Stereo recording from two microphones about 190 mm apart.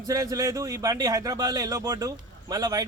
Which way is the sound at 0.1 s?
20° right (ahead or behind).